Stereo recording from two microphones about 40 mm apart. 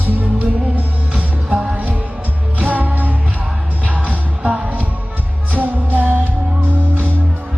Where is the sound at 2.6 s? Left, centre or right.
Right.